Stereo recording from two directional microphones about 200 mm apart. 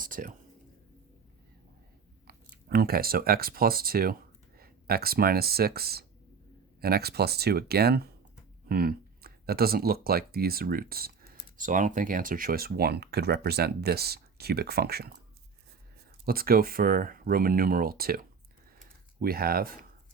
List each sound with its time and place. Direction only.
0.0 s whispering: 45° right (ahead or behind)
2.2 s speech: 50° right (ahead or behind)
16.2 s speech: 50° right (ahead or behind)